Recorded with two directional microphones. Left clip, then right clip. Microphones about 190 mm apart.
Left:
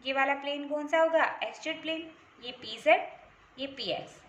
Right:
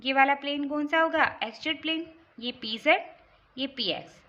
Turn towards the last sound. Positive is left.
turn(degrees=-45)  # may be behind; listen again after turning